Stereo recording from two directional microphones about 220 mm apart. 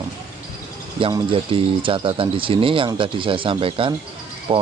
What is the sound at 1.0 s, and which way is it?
Speech, 25° right (ahead or behind).